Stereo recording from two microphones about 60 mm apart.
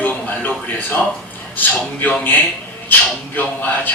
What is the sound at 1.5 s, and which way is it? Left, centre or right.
Speech, left.